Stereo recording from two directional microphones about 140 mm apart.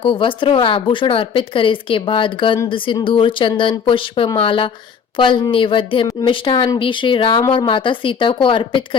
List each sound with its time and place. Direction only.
0.0 s speech: 35° left (ahead or behind)